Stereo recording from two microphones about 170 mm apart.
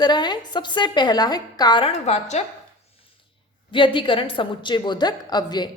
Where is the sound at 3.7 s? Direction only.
30° left (ahead or behind).